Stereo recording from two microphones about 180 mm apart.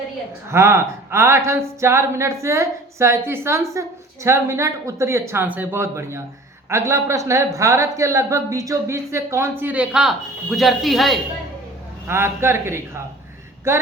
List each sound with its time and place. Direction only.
0.4 s speech: 15° right (ahead or behind)
12.0 s speech: 15° right (ahead or behind)